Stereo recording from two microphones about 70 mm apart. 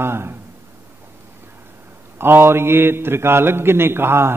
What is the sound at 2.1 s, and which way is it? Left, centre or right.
A man's voice, right.